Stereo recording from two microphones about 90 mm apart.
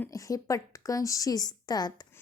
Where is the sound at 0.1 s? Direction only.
40° left (ahead or behind).